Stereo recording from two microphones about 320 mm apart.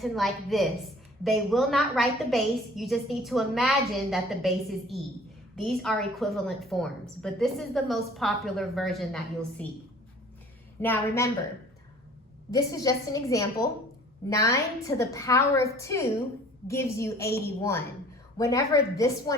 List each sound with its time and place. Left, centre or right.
0.0 s a woman's voice: centre
10.8 s a woman's voice: centre
12.5 s a woman's voice: centre